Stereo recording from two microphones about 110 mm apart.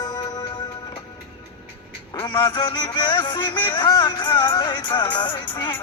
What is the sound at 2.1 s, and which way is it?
A man's voice, 45° left (ahead or behind).